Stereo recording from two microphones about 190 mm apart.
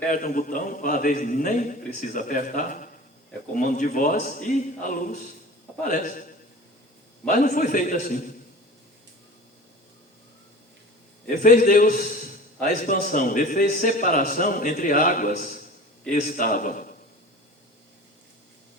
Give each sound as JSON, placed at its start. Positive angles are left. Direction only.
{"t": 0.1, "sound": "a man's voice", "side_deg": 45}
{"t": 7.3, "sound": "a man's voice", "side_deg": 45}
{"t": 11.3, "sound": "a man's voice", "side_deg": 40}